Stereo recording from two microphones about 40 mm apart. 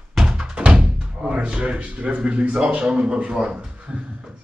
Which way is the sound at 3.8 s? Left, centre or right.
Right.